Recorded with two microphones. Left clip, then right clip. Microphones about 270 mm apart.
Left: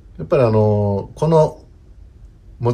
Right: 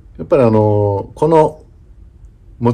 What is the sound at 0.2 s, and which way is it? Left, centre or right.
Speech, right.